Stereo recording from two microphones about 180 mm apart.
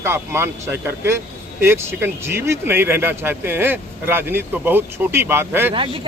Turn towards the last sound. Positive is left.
turn(degrees=-30)  # may be behind; listen again after turning